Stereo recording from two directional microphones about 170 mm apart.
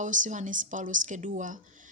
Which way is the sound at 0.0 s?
50° right (ahead or behind).